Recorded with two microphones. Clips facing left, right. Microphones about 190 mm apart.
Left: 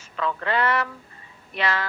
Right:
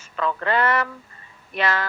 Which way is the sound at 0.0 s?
45° right (ahead or behind).